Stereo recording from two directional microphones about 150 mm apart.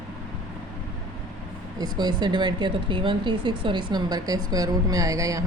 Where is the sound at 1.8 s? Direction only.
30° right (ahead or behind).